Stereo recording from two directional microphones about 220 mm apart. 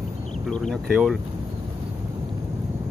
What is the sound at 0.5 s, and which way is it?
Speech, centre (ahead or behind).